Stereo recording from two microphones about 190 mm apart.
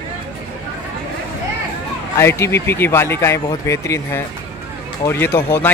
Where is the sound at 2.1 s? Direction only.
15° left (ahead or behind).